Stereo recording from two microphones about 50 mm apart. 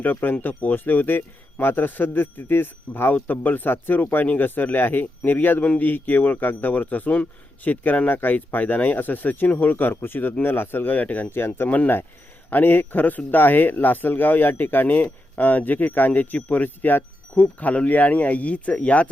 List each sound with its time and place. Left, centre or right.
0.0 s speech: left
11.3 s speech: left
17.4 s speech: left